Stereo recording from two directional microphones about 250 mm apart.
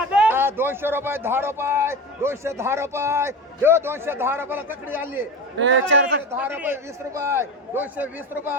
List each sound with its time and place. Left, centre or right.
0.0 s a man's voice: centre
5.5 s a man's voice: right
6.3 s a man's voice: centre